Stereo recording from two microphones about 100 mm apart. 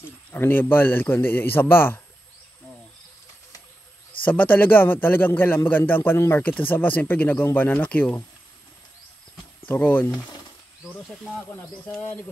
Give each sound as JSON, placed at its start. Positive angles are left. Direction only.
{"t": 0.3, "sound": "a man's voice", "side_deg": 20}
{"t": 4.2, "sound": "a man's voice", "side_deg": 15}
{"t": 9.7, "sound": "speech", "side_deg": 15}